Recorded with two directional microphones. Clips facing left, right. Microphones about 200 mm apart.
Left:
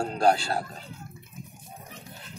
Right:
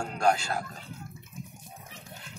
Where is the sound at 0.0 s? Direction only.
35° left (ahead or behind).